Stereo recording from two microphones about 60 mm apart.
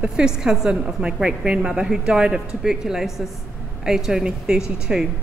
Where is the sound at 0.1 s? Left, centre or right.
Centre.